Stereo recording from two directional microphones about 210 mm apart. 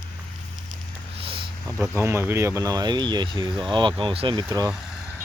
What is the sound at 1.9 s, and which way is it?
Speech, 15° right (ahead or behind).